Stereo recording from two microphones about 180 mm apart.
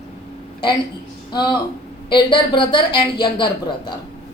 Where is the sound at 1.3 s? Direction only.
25° left (ahead or behind).